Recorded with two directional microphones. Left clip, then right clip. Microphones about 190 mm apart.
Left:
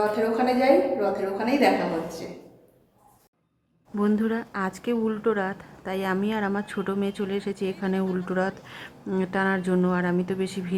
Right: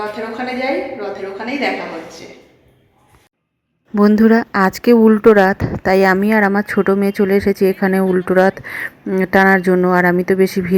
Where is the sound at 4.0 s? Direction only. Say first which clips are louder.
Right 14 dB; 30° right (ahead or behind).